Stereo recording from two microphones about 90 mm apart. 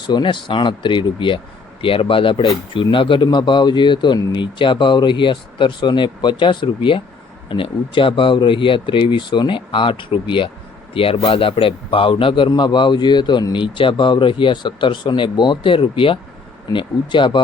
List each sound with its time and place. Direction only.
0.1 s a man's voice: 65° left (ahead or behind)
1.8 s speech: 85° left; by 3.2 s 70° left (ahead or behind)
3.2 s a man's voice: 60° left (ahead or behind)
10.9 s a man's voice: 90° left
16.7 s a man's voice: 60° left (ahead or behind)